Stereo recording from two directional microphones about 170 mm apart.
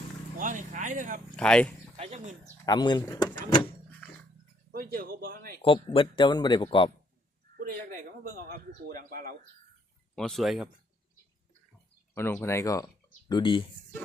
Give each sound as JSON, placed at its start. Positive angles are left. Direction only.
{"t": 0.3, "sound": "speech", "side_deg": -50}
{"t": 1.4, "sound": "speech", "side_deg": 5}
{"t": 2.0, "sound": "speech", "side_deg": -40}
{"t": 2.6, "sound": "speech", "side_deg": 25}
{"t": 4.7, "sound": "speech", "side_deg": -60}
{"t": 5.6, "sound": "speech", "side_deg": 30}
{"t": 8.2, "sound": "speech", "side_deg": -60}
{"t": 10.2, "sound": "speech", "side_deg": 0}
{"t": 12.1, "sound": "speech", "side_deg": 15}